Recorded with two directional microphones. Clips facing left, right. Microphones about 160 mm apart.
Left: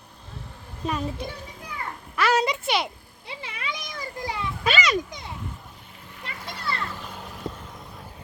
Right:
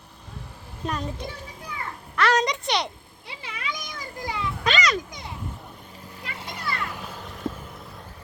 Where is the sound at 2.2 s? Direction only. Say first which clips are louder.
Even; 5° left (ahead or behind).